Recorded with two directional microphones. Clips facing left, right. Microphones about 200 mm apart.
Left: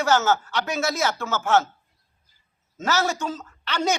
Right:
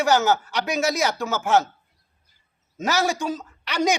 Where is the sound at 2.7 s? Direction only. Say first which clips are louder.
Right 1 dB; 15° right (ahead or behind).